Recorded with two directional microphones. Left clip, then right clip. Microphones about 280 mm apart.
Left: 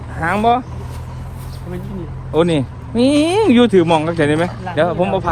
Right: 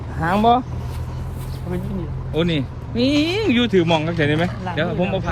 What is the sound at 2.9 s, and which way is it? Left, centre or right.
Speech, centre.